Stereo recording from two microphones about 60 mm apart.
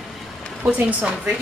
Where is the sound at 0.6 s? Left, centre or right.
Right.